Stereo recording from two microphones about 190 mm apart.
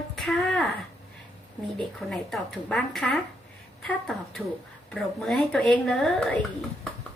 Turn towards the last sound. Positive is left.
turn(degrees=5)  # may be behind; listen again after turning